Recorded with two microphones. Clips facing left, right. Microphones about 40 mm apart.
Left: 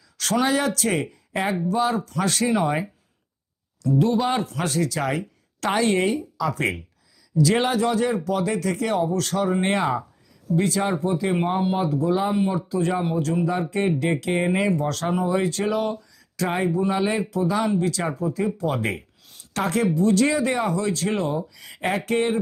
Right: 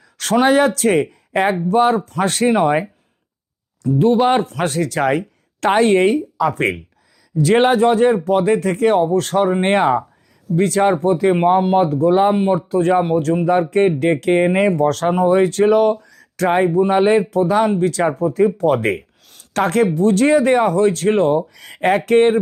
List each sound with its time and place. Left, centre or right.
0.2 s speech: right
1.1 s a sound: right
1.6 s speech: right
3.8 s speech: right
19.2 s speech: right